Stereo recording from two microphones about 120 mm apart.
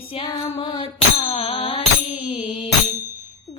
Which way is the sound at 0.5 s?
50° left (ahead or behind).